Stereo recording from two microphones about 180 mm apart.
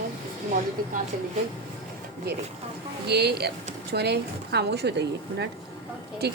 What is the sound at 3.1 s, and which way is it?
Speech, 65° right (ahead or behind).